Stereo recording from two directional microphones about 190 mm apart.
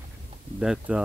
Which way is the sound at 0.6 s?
5° right (ahead or behind).